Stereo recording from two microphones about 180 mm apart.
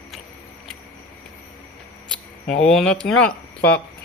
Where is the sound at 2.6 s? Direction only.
5° left (ahead or behind).